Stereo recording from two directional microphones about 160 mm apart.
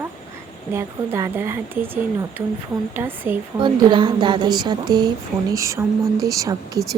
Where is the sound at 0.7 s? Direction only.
15° right (ahead or behind).